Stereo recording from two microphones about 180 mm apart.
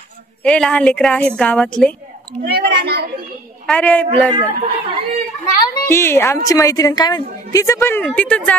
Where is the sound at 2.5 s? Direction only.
65° right (ahead or behind).